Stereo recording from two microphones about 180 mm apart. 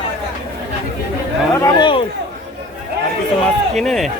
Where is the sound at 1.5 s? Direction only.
20° left (ahead or behind).